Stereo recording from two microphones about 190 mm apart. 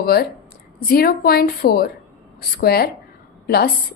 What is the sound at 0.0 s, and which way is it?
A woman's voice, 55° left (ahead or behind).